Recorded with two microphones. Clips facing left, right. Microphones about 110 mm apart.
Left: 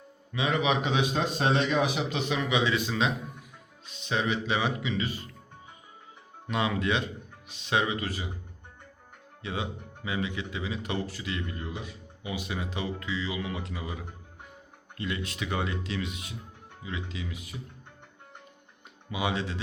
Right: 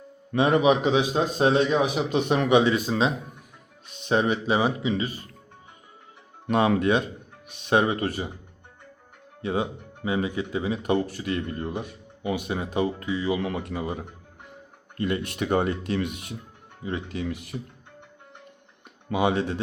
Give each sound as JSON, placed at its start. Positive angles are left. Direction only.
{"t": 0.3, "sound": "speech", "side_deg": -50}
{"t": 2.0, "sound": "speech", "side_deg": -50}
{"t": 6.5, "sound": "speech", "side_deg": -50}
{"t": 9.4, "sound": "speech", "side_deg": -40}
{"t": 19.0, "sound": "speech", "side_deg": -50}